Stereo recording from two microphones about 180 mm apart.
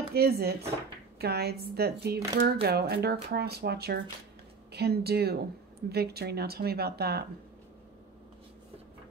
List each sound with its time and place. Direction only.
0.1 s speech: 60° right (ahead or behind)